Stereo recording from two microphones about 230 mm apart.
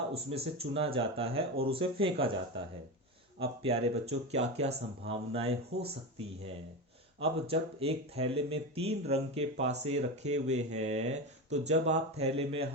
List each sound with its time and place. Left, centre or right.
0.1 s speech: right